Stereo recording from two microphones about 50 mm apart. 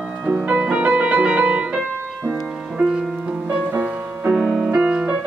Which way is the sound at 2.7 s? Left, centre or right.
Centre.